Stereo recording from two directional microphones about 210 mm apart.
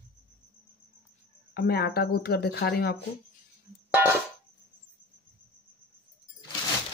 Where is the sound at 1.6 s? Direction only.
50° left (ahead or behind).